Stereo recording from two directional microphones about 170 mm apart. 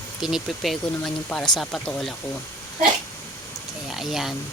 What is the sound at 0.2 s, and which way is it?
A woman's voice, 5° right (ahead or behind).